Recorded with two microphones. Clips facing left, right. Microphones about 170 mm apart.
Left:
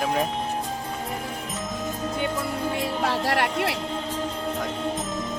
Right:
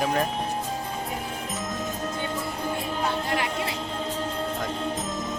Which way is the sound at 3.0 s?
85° left.